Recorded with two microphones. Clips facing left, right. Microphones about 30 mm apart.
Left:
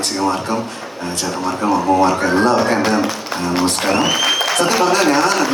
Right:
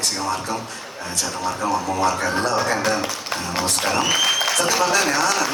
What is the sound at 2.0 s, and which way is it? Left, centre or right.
Speech, left.